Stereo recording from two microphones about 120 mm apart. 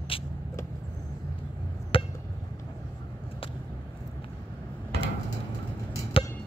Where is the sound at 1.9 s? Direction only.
50° left (ahead or behind).